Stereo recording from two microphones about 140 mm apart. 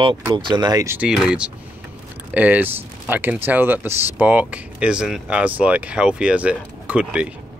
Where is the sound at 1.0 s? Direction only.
5° right (ahead or behind).